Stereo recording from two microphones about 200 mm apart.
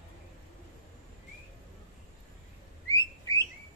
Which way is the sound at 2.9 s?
15° left (ahead or behind).